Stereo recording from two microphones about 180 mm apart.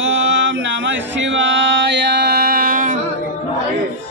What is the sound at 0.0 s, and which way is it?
Chant, 90° right.